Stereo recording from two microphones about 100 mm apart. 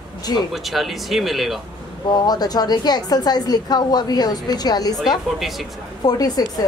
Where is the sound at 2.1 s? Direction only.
40° left (ahead or behind).